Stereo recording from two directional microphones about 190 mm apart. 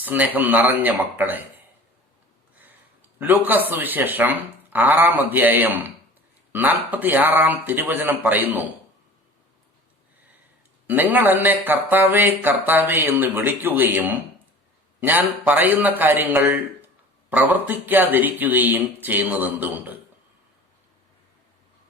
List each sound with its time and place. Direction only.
0.0 s a man's voice: 10° right (ahead or behind)
3.2 s a man's voice: 10° right (ahead or behind)
10.8 s a man's voice: 10° right (ahead or behind)